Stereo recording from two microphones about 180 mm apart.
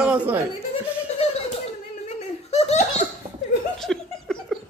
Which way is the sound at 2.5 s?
35° left (ahead or behind).